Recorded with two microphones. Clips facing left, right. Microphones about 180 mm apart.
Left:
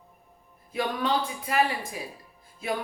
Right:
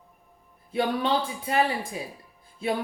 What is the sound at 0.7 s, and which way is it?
A woman's voice, 30° right (ahead or behind).